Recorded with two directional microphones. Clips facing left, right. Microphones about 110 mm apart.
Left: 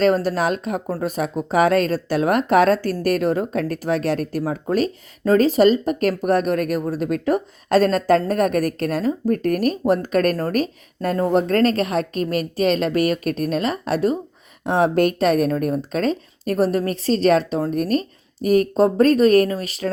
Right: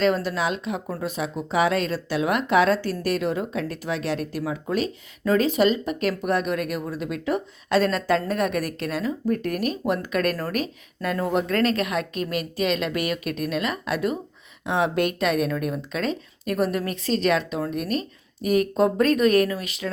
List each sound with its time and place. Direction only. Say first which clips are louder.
0.0 s speech: left 4 dB; 40° left (ahead or behind)